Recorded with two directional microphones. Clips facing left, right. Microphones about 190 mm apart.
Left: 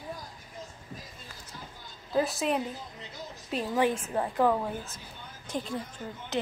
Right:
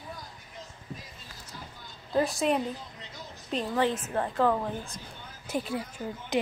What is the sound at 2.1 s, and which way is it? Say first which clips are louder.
A woman's voice: right 2 dB; centre (ahead or behind).